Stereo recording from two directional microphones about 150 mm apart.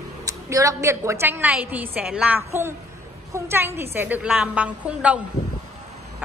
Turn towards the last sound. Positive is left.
turn(degrees=-10)  # may be behind; listen again after turning